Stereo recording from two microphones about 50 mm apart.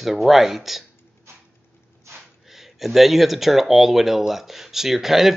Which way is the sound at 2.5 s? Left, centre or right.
Centre.